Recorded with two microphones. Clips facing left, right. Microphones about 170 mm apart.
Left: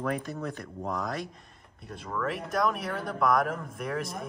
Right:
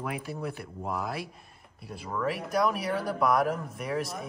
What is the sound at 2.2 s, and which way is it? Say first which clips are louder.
Speech: right 1 dB; 5° right (ahead or behind).